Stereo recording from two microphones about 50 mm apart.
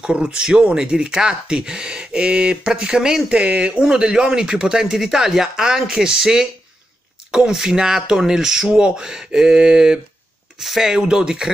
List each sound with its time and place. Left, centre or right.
0.0 s speech: centre
3.3 s speech: right